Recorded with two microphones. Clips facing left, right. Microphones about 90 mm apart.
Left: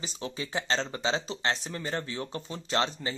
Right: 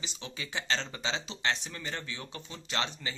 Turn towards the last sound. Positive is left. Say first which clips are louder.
# left 5 dB
turn(degrees=35)  # may be behind; listen again after turning